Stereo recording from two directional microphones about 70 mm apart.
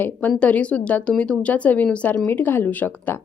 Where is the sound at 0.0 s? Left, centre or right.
Left.